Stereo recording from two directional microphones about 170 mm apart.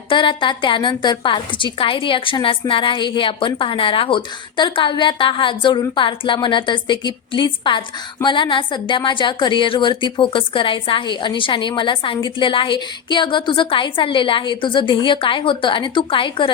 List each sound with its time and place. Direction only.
0.1 s a woman's voice: 30° left (ahead or behind)